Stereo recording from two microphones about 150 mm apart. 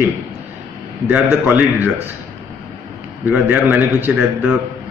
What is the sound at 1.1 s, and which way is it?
Speech, 10° right (ahead or behind).